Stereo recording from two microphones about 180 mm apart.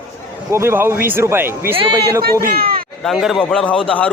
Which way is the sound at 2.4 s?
55° right (ahead or behind).